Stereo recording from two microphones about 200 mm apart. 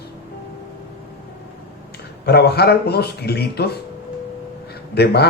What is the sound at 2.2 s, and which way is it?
Speech, 55° left (ahead or behind).